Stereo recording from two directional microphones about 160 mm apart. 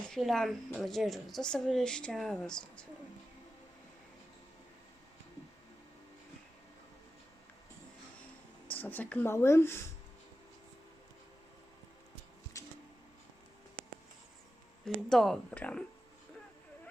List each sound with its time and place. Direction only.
0.1 s a woman's voice: centre (ahead or behind)
8.7 s speech: 10° left (ahead or behind)
12.5 s a sound: 20° left (ahead or behind)
14.8 s a woman's voice: centre (ahead or behind)